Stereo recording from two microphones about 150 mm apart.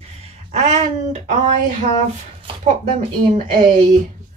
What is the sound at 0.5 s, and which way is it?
Speech, 50° right (ahead or behind).